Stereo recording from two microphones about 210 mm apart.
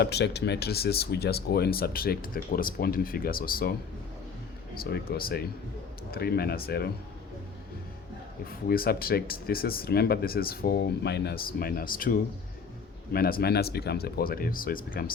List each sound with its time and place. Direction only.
0.0 s speech: 50° left (ahead or behind)
4.8 s speech: 50° left (ahead or behind)
8.4 s speech: 45° left (ahead or behind)